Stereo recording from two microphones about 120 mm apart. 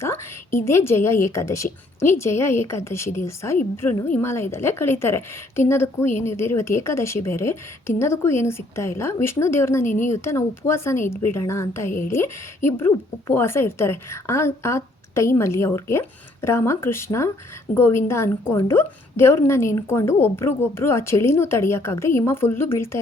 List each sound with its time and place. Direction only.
0.0 s a woman's voice: 20° left (ahead or behind)